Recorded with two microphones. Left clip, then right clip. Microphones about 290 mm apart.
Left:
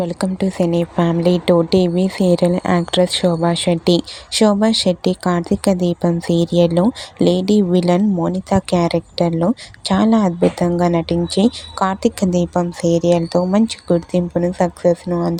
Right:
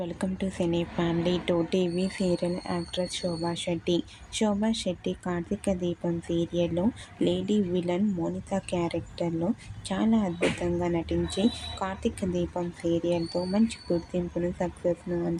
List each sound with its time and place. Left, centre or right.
0.0 s speech: left